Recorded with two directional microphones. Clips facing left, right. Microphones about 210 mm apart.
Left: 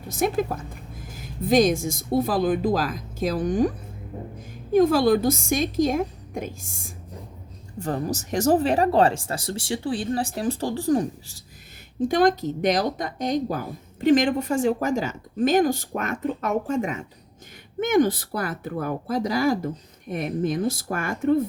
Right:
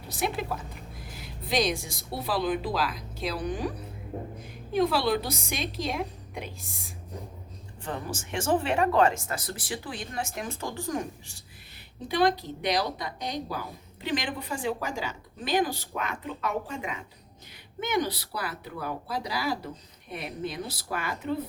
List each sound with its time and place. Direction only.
0.1 s a woman's voice: 45° left (ahead or behind)